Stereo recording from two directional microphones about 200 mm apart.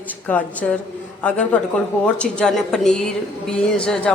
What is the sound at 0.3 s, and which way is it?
A woman's voice, 5° left (ahead or behind).